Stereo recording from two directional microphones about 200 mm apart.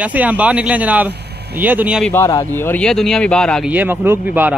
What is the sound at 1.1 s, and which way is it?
Speech, 55° right (ahead or behind).